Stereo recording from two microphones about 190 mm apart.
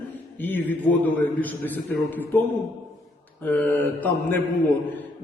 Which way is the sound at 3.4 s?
10° left (ahead or behind).